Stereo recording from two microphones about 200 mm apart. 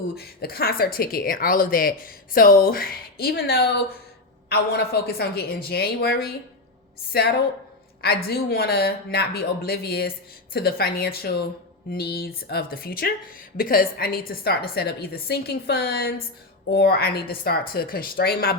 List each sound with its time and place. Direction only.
0.2 s a woman's voice: 50° left (ahead or behind)